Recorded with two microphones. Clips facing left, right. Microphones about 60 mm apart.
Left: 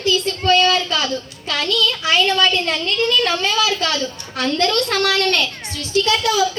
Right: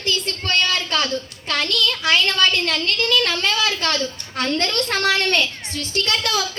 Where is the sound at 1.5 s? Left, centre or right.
Right.